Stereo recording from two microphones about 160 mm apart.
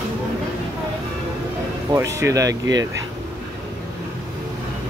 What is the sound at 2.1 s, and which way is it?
Speech, 20° right (ahead or behind).